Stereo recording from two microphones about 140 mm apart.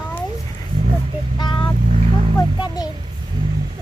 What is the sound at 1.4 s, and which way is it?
Vehicle, 35° left (ahead or behind).